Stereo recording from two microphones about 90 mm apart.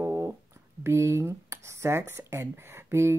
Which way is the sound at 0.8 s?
30° right (ahead or behind).